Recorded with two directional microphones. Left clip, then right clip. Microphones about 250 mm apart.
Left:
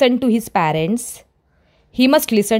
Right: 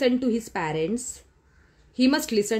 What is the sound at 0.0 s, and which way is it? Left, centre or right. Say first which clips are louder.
A woman's voice: left 8 dB; left.